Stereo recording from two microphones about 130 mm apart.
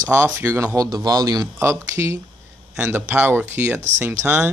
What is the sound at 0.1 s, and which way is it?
Speech, 15° right (ahead or behind).